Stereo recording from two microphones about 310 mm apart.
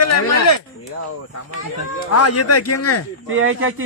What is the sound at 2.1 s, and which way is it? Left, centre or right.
Speech, left.